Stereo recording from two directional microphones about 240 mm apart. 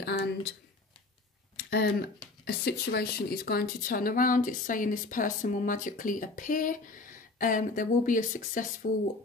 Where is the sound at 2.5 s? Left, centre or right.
Left.